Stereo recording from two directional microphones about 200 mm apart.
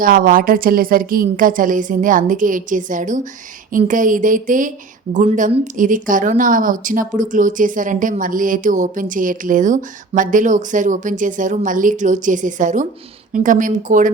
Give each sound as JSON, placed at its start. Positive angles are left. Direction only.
{"t": 0.0, "sound": "a woman's voice", "side_deg": -45}